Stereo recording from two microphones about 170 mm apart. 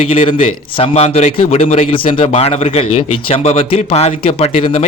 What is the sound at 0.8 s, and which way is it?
Speech, 40° left (ahead or behind).